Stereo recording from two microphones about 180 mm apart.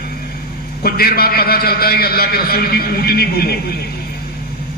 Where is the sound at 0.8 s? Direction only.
55° left (ahead or behind).